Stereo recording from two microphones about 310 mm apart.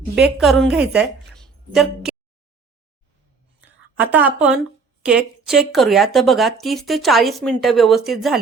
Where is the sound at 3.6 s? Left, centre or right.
Centre.